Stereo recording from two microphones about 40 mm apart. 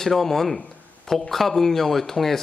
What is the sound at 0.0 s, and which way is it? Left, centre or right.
Speech, centre.